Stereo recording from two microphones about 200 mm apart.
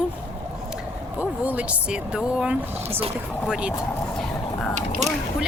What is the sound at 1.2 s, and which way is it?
Speech, 5° right (ahead or behind).